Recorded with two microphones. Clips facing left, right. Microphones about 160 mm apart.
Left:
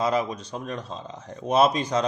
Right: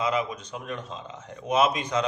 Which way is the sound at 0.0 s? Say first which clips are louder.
Left 3 dB; 35° left (ahead or behind).